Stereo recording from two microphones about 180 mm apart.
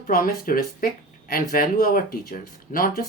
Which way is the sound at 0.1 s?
55° left (ahead or behind).